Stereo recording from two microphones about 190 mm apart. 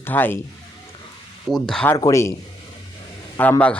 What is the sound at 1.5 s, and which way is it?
Speech, 5° left (ahead or behind).